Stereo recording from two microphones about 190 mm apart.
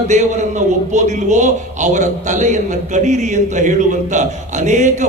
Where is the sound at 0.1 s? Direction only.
40° right (ahead or behind).